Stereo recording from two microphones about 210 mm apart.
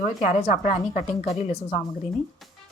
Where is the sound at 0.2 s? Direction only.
35° left (ahead or behind).